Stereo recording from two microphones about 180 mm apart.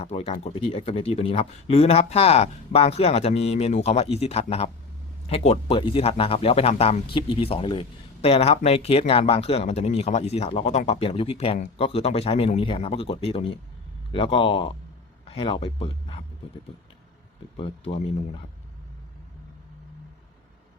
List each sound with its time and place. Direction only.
0.0 s speech: 35° left (ahead or behind)
17.6 s speech: 30° left (ahead or behind)